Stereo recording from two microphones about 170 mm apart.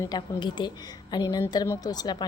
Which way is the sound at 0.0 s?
25° left (ahead or behind).